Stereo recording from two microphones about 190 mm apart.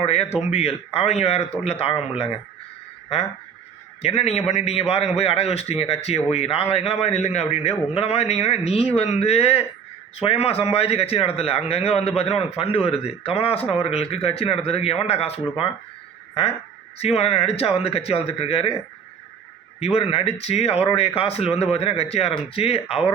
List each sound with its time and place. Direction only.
0.0 s a man's voice: 35° left (ahead or behind)
4.0 s a man's voice: 35° left (ahead or behind)
19.8 s a man's voice: 30° left (ahead or behind)